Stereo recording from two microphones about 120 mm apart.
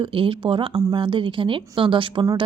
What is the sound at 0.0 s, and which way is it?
A woman's voice, 45° right (ahead or behind).